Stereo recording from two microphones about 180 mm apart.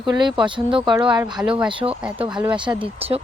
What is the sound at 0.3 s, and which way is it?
Speech, 25° right (ahead or behind).